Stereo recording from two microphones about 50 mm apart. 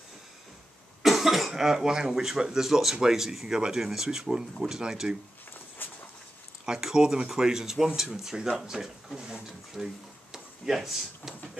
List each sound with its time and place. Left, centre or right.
1.0 s speech: centre
5.8 s a sound: left
6.6 s speech: centre